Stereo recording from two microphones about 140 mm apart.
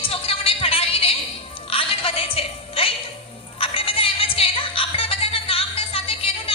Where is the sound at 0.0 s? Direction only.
40° left (ahead or behind).